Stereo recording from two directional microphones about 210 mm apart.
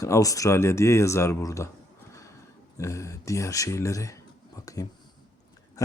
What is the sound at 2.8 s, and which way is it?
Speech, 15° left (ahead or behind).